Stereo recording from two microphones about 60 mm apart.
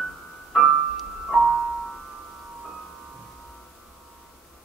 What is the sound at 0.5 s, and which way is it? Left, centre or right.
Piano, centre.